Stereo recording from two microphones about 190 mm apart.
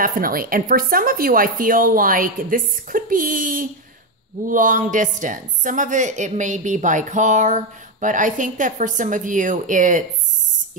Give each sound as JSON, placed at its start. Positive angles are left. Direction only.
{"t": 0.0, "sound": "a woman's voice", "side_deg": -50}